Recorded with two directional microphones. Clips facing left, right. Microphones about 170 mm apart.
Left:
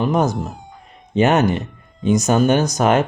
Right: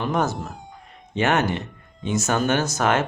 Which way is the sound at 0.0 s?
15° left (ahead or behind).